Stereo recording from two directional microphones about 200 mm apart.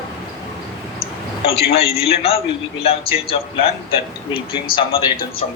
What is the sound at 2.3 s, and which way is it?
A man's voice, 30° left (ahead or behind).